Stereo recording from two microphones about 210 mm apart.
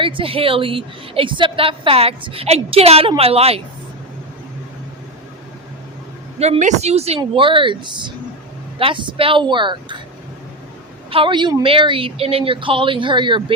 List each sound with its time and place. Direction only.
0.0 s a woman's voice: 25° right (ahead or behind)
6.4 s a woman's voice: 30° right (ahead or behind)
11.1 s a woman's voice: 25° right (ahead or behind)